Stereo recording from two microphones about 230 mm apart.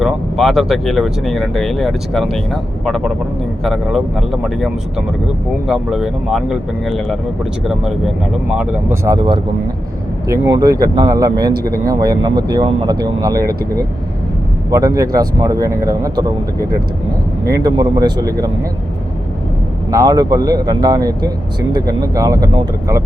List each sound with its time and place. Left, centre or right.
0.0 s speech: centre
11.5 s speech: right
11.9 s speech: centre
14.7 s speech: centre
17.4 s speech: centre
19.9 s speech: centre